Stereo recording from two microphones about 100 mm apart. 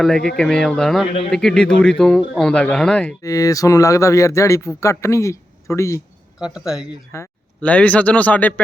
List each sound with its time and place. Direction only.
0.0 s speech: 5° left (ahead or behind)
3.2 s speech: 35° left (ahead or behind)
6.4 s speech: 5° right (ahead or behind)
7.1 s speech: 30° left (ahead or behind)
7.6 s speech: 15° left (ahead or behind)